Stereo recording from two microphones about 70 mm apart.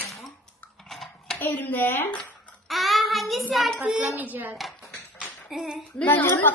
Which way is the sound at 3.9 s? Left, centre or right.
Right.